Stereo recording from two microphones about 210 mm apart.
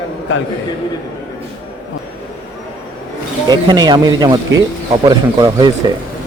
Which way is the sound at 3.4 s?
20° right (ahead or behind).